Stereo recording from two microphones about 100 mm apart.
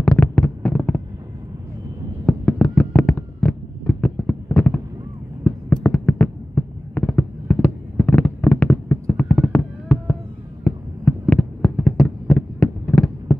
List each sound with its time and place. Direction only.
0.0 s fireworks: 10° left (ahead or behind)
2.2 s fireworks: 10° left (ahead or behind)
5.4 s heart sounds: 5° left (ahead or behind)
7.5 s fireworks: 15° left (ahead or behind)